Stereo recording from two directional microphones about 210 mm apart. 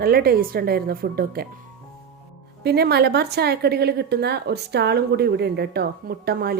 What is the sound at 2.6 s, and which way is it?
Speech, 50° right (ahead or behind).